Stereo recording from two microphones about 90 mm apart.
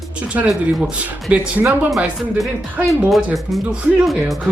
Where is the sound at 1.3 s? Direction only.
15° right (ahead or behind).